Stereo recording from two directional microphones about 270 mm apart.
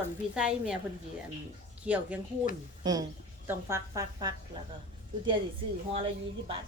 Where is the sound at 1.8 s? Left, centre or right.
Centre.